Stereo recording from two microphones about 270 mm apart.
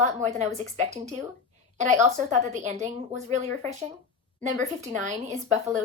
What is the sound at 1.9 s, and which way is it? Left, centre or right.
A woman's voice, right.